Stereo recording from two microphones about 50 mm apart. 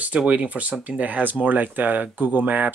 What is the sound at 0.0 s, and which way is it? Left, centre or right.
Speech, right.